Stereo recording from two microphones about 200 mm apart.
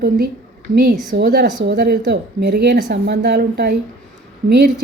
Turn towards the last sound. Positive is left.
turn(degrees=-50)  # may be behind; listen again after turning